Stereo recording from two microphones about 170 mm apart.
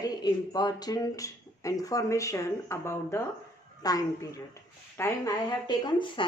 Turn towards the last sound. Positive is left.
turn(degrees=25)  # may be behind; listen again after turning